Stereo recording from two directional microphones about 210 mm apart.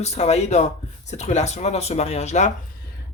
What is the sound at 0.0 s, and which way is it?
Speech, 30° left (ahead or behind).